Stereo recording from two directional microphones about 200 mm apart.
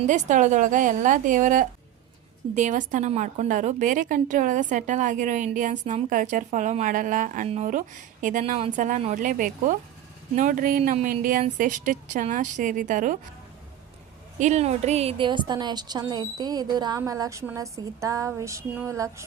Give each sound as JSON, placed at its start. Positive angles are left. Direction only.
{"t": 0.0, "sound": "a woman's voice", "side_deg": -40}
{"t": 14.3, "sound": "a woman's voice", "side_deg": -35}
{"t": 17.0, "sound": "a sound", "side_deg": -15}